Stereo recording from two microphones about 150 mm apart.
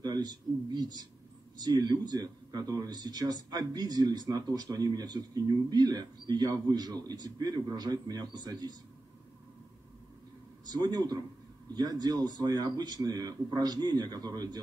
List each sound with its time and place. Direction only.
0.0 s a man's voice: 25° right (ahead or behind)
10.7 s a man's voice: 30° right (ahead or behind)